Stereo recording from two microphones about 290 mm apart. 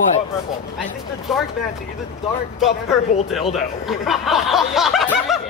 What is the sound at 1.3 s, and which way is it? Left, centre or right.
Speech, centre.